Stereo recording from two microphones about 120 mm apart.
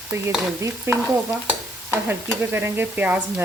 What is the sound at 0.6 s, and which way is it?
Speech, 20° right (ahead or behind).